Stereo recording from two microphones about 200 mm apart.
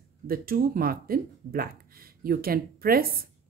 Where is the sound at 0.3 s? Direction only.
45° right (ahead or behind).